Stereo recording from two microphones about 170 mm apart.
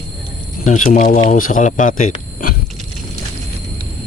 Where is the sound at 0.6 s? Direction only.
50° left (ahead or behind).